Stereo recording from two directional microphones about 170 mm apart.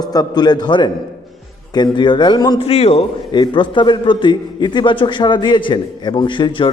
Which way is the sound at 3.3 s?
25° left (ahead or behind).